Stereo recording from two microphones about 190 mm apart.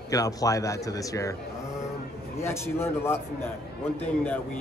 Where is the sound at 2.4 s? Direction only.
15° left (ahead or behind).